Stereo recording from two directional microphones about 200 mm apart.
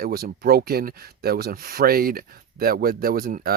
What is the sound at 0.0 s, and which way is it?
Speech, 50° right (ahead or behind).